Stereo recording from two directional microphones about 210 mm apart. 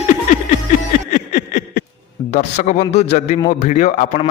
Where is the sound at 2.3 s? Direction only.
35° left (ahead or behind).